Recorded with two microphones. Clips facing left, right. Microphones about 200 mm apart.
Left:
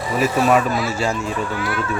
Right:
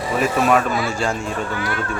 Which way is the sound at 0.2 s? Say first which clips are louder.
Left 1 dB; centre (ahead or behind).